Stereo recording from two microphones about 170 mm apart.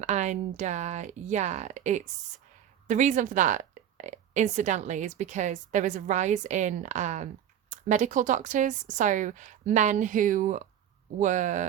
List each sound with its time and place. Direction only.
0.0 s a woman's voice: 45° right (ahead or behind)